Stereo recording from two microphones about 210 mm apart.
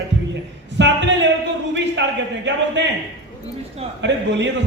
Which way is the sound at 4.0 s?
55° right (ahead or behind).